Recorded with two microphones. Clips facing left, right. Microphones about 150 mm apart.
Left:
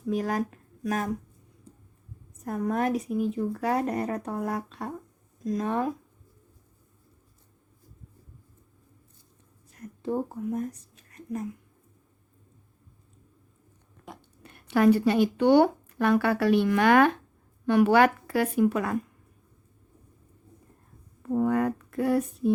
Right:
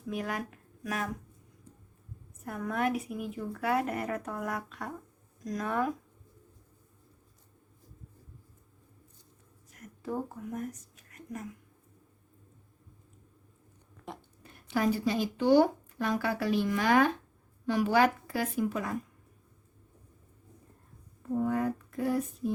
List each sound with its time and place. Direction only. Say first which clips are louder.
0.1 s speech: left 7 dB; 35° left (ahead or behind)
2.4 s a woman's voice: left 4 dB; 35° left (ahead or behind)
9.7 s a sound: left 6 dB; 30° left (ahead or behind)
14.2 s a woman's voice: left 3 dB; 65° left (ahead or behind)
21.3 s speech: left 5 dB; 70° left (ahead or behind)